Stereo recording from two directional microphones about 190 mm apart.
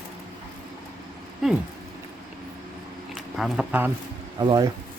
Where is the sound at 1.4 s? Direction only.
Centre (ahead or behind).